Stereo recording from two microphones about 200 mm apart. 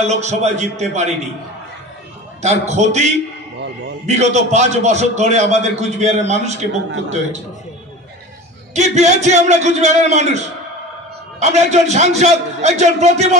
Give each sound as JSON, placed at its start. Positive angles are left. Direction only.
{"t": 0.0, "sound": "a man's voice", "side_deg": -35}
{"t": 2.4, "sound": "a man's voice", "side_deg": -35}
{"t": 8.7, "sound": "a man's voice", "side_deg": -35}